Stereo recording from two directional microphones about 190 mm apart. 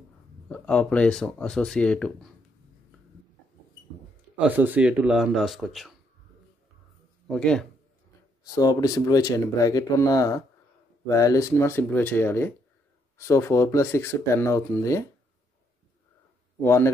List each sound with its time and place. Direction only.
0.5 s speech: 5° left (ahead or behind)
4.4 s speech: 10° right (ahead or behind)
7.2 s speech: 5° left (ahead or behind)
8.5 s speech: 20° left (ahead or behind)
16.6 s speech: 15° left (ahead or behind)